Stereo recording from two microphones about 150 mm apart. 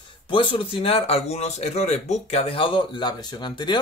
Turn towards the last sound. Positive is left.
turn(degrees=30)  # may be behind; listen again after turning